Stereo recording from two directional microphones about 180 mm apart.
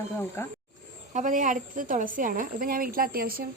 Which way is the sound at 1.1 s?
45° right (ahead or behind).